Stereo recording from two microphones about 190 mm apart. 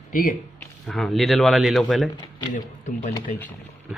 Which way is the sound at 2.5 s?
45° left (ahead or behind).